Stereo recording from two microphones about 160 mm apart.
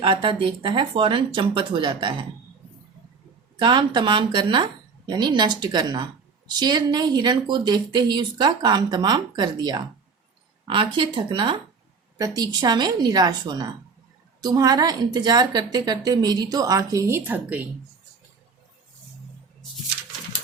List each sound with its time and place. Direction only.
0.0 s speech: 30° right (ahead or behind)
3.6 s a woman's voice: 30° right (ahead or behind); by 17.6 s 10° right (ahead or behind)